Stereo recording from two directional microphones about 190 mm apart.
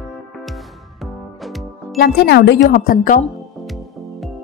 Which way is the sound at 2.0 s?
55° left (ahead or behind).